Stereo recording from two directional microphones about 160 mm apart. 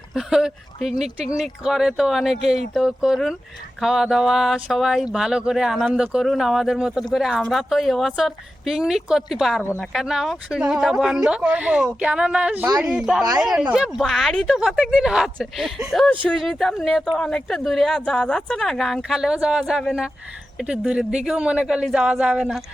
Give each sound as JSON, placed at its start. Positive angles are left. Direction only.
{"t": 0.1, "sound": "speech", "side_deg": 0}
{"t": 12.6, "sound": "speech", "side_deg": -25}
{"t": 12.9, "sound": "speech", "side_deg": -5}